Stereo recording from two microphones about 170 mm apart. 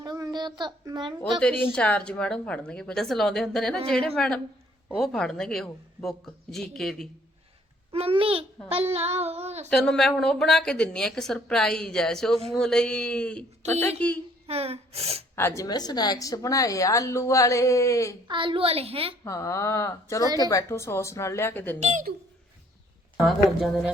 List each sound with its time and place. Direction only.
0.0 s child singing: 20° right (ahead or behind)
1.2 s a woman's voice: 5° left (ahead or behind)
7.9 s a woman's voice: 35° right (ahead or behind)
9.6 s a woman's voice: 5° left (ahead or behind)
14.4 s speech: 35° right (ahead or behind)
15.4 s a woman's voice: 15° left (ahead or behind)
18.3 s a woman's voice: 30° right (ahead or behind)
19.2 s a woman's voice: 20° left (ahead or behind)
21.8 s a woman's voice: 40° right (ahead or behind)
23.1 s a woman's voice: centre (ahead or behind)